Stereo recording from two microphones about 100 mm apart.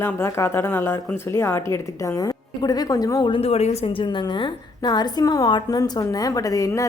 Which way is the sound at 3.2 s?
70° left (ahead or behind).